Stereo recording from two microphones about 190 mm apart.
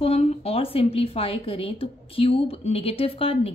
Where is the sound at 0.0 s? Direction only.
30° left (ahead or behind).